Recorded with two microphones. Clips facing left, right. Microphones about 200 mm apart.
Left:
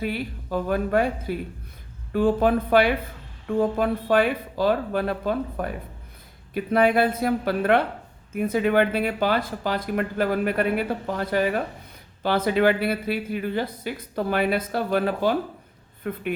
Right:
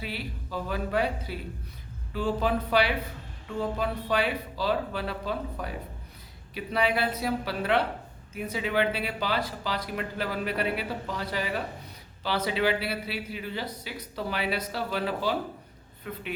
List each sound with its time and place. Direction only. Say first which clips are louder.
0.0 s speech: left 8 dB; 50° left (ahead or behind)